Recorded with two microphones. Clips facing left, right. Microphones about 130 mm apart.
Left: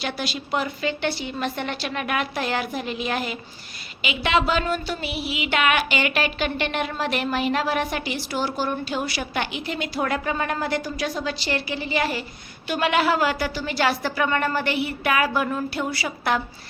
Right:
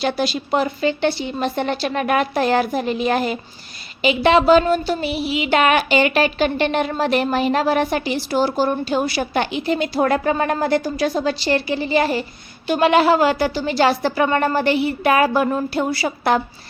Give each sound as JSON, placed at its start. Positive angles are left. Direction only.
{"t": 0.0, "sound": "speech", "side_deg": -35}